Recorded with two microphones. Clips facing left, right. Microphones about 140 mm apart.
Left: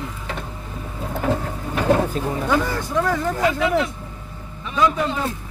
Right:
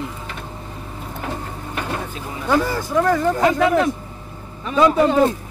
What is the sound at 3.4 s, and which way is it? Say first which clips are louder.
Speech: right 3 dB; 45° right (ahead or behind).